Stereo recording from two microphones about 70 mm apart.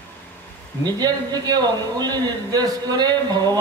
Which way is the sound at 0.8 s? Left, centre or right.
Right.